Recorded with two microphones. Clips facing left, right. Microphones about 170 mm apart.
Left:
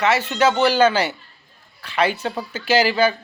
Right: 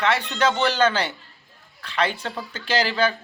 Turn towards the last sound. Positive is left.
turn(degrees=10)  # may be behind; listen again after turning